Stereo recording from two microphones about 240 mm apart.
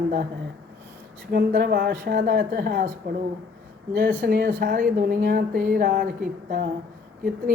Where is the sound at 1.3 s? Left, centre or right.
Right.